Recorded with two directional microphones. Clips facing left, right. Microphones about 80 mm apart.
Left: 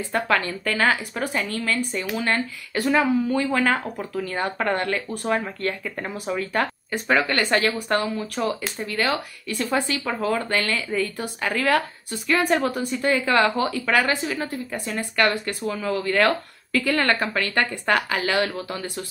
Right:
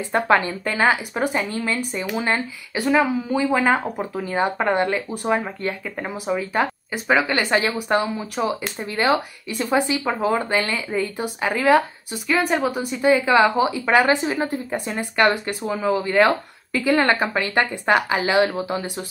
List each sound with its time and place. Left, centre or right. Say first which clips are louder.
0.1 s speech: right 5 dB; right
2.8 s speech: right 1 dB; centre; by 9.7 s right
9.7 s speech: right 5 dB; centre
12.3 s speech: even; centre
13.8 s speech: right 5 dB; right